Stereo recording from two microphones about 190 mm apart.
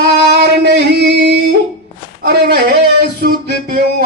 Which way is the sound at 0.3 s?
60° right (ahead or behind).